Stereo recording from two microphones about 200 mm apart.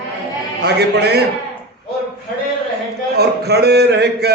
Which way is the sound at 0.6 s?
55° right (ahead or behind).